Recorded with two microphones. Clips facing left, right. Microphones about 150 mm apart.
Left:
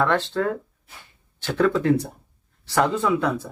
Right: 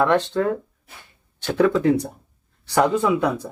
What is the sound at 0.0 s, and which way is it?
Speech, 15° right (ahead or behind).